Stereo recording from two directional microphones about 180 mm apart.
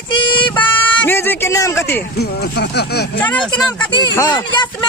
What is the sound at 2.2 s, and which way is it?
Speech, 65° left (ahead or behind).